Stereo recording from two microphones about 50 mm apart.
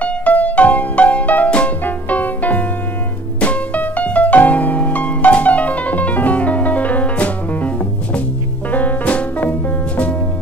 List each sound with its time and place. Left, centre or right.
0.0 s music: left